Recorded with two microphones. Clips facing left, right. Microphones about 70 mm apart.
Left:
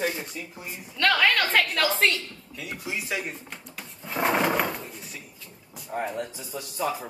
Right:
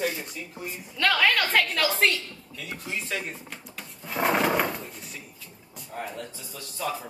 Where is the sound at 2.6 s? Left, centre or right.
Centre.